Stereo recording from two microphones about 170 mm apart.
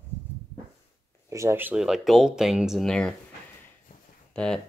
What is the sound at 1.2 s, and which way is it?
Speech, 15° right (ahead or behind).